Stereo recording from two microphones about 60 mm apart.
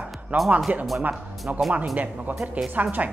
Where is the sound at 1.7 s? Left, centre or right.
Right.